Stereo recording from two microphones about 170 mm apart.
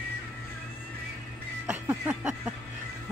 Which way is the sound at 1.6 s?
10° right (ahead or behind).